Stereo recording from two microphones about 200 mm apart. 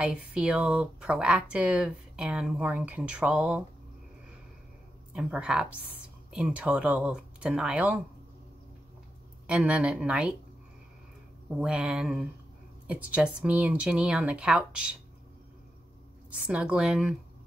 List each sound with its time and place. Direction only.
0.0 s speech: 5° right (ahead or behind)
5.1 s speech: 5° right (ahead or behind)
9.5 s speech: 5° right (ahead or behind)
11.5 s speech: 5° right (ahead or behind)
16.3 s speech: 5° right (ahead or behind)